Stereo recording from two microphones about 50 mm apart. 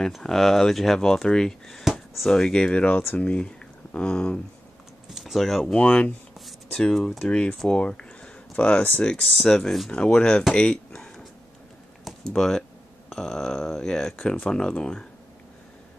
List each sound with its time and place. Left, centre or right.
0.0 s speech: centre
5.1 s speech: centre
5.8 s speech: left
6.7 s speech: centre
7.2 s speech: left
9.1 s speech: centre
10.5 s a sound: centre
12.3 s speech: centre